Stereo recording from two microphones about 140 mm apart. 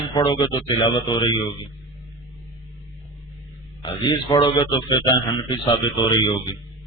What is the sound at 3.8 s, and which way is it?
A man's voice, 35° left (ahead or behind).